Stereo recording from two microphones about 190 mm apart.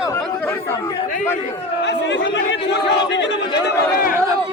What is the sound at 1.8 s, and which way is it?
Speech, 70° left (ahead or behind).